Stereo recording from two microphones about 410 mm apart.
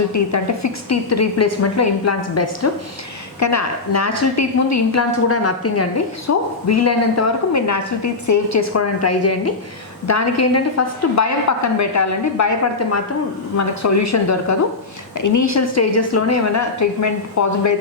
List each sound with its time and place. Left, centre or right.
0.1 s a woman's voice: left